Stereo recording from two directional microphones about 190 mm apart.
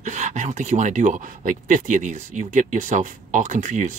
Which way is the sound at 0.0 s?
40° right (ahead or behind).